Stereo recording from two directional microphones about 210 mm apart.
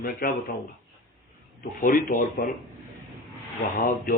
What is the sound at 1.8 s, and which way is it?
Speech, 40° left (ahead or behind).